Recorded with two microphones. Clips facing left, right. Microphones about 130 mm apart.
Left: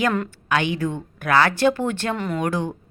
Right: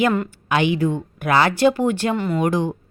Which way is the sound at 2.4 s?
15° right (ahead or behind).